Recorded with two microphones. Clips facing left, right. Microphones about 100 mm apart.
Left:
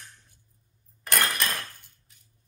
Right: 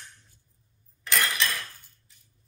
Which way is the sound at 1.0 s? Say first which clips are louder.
Even; 50° left (ahead or behind).